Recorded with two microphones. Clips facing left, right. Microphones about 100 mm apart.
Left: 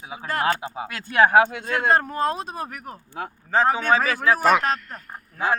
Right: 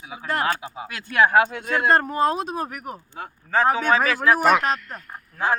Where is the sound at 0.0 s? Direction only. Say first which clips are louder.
Even; 25° left (ahead or behind).